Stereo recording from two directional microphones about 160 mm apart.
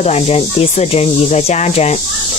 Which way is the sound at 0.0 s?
40° left (ahead or behind).